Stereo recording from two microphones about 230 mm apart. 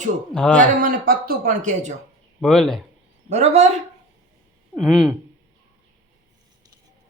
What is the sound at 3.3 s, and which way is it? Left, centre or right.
Speech, right.